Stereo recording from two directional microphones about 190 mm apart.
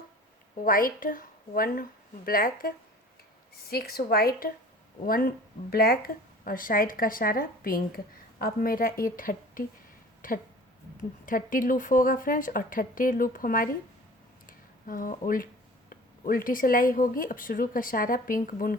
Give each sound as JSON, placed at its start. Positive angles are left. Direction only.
{"t": 0.6, "sound": "a woman's voice", "side_deg": 50}
{"t": 14.4, "sound": "a sound", "side_deg": 45}
{"t": 15.9, "sound": "speech", "side_deg": 45}